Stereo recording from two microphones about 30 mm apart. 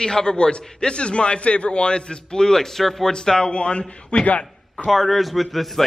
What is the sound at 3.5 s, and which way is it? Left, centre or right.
Speech, left.